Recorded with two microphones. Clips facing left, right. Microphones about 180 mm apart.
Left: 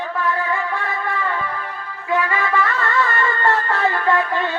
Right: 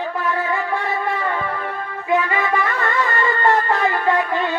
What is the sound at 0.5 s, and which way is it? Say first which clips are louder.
Music: right 2 dB; 20° right (ahead or behind).